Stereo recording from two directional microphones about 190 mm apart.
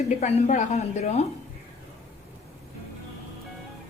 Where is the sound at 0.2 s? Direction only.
35° left (ahead or behind).